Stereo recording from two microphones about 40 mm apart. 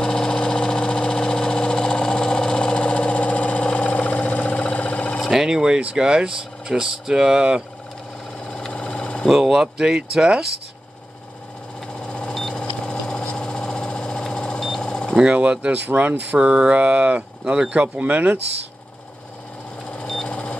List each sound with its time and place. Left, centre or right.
0.0 s engine: centre
5.3 s speech: centre
8.7 s engine: left
9.5 s speech: centre
12.1 s vehicle: left
12.4 s vehicle: centre
12.8 s engine: left
14.1 s a sound: centre
15.1 s speech: right
15.9 s speech: right
16.3 s speech: right
20.2 s a sound: left